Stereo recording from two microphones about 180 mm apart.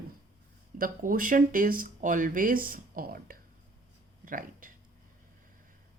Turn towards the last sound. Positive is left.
turn(degrees=-50)  # may be behind; listen again after turning